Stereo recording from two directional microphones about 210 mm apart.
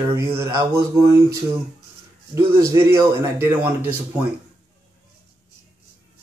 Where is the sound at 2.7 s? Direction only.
10° right (ahead or behind).